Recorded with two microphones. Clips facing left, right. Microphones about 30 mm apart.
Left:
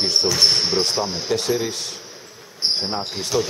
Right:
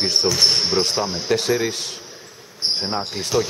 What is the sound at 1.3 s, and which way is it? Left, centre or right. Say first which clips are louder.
Speech: right 3 dB; right.